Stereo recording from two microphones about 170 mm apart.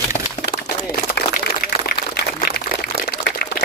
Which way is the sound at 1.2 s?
70° left (ahead or behind).